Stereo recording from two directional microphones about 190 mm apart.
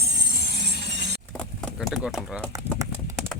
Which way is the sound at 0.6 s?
65° right (ahead or behind).